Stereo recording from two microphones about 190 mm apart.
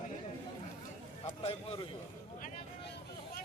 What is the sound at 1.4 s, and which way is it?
Speech, 30° left (ahead or behind).